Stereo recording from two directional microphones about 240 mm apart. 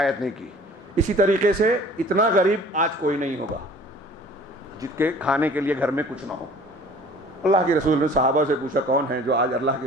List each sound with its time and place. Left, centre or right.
0.0 s a man's voice: centre
0.9 s a man's voice: right
4.8 s speech: centre
7.5 s a man's voice: right